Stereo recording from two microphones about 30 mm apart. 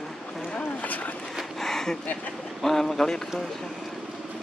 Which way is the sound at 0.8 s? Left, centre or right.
Left.